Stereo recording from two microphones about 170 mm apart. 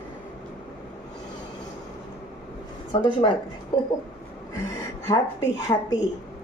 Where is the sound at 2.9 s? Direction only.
25° left (ahead or behind).